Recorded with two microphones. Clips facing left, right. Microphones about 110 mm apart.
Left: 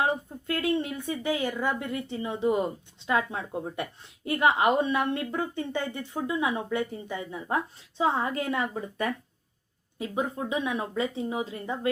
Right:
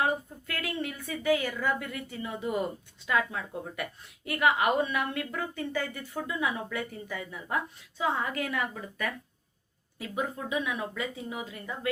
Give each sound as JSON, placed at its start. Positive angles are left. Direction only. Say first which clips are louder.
{"t": 0.0, "sound": "speech", "louder": "left 2 dB", "side_deg": 25}